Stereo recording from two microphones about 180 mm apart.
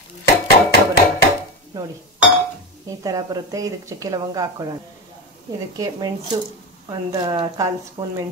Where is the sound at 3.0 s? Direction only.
20° right (ahead or behind).